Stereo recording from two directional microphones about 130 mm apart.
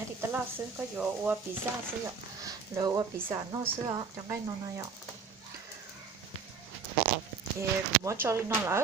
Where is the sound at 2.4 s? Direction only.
25° right (ahead or behind).